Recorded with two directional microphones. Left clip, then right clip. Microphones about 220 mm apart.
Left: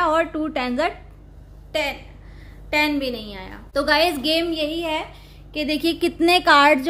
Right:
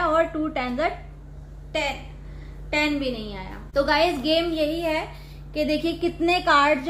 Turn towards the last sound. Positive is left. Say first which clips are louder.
# left 4 dB
turn(degrees=50)  # may be behind; listen again after turning